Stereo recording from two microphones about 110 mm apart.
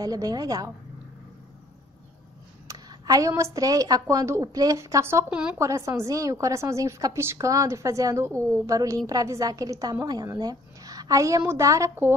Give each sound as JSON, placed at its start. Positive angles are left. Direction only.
{"t": 0.0, "sound": "a woman's voice", "side_deg": -35}
{"t": 2.7, "sound": "a sound", "side_deg": -30}
{"t": 3.5, "sound": "a woman's voice", "side_deg": -30}
{"t": 5.3, "sound": "a woman's voice", "side_deg": -10}
{"t": 5.6, "sound": "a woman's voice", "side_deg": -30}